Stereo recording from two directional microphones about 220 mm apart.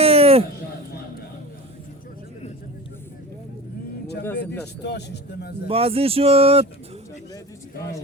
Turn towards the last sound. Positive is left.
turn(degrees=-25)  # may be behind; listen again after turning